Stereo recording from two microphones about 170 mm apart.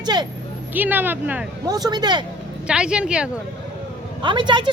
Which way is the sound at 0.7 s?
10° right (ahead or behind).